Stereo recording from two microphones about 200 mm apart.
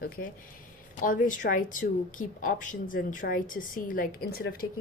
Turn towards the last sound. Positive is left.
turn(degrees=50)  # may be behind; listen again after turning